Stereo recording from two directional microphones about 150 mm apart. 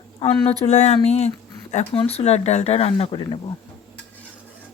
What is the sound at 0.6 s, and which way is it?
Speech, 50° left (ahead or behind).